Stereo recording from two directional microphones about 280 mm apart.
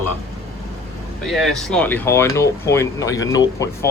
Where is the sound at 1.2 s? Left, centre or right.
Centre.